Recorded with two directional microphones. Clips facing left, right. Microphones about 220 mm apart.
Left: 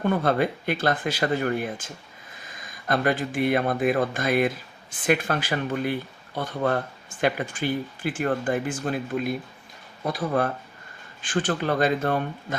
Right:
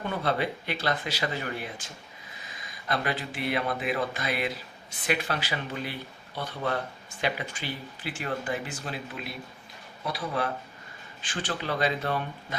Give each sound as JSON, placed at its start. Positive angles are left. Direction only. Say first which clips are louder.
{"t": 0.0, "sound": "speech", "louder": "left 6 dB", "side_deg": 50}